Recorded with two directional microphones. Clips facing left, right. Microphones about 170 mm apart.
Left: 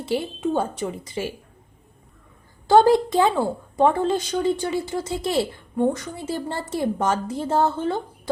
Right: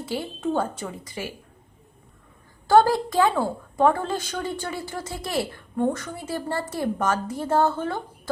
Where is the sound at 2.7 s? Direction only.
20° left (ahead or behind).